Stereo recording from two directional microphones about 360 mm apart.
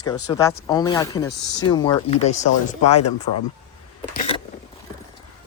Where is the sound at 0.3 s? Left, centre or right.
Centre.